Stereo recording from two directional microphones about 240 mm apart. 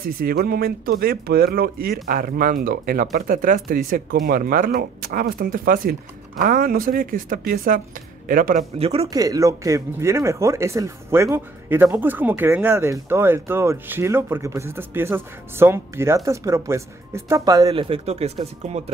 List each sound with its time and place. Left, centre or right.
0.0 s speech: right